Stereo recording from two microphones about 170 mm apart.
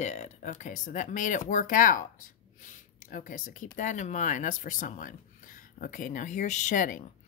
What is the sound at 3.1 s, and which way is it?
Speech, 45° left (ahead or behind).